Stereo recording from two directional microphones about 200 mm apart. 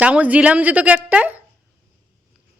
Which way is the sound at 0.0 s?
5° right (ahead or behind).